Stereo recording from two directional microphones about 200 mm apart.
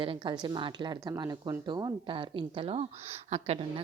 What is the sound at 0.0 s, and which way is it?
A woman's voice, 25° right (ahead or behind).